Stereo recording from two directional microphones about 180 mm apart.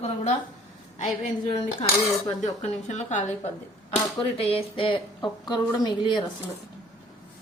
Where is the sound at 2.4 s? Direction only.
40° left (ahead or behind).